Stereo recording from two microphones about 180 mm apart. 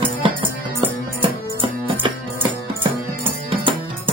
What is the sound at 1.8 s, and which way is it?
Music, 30° right (ahead or behind).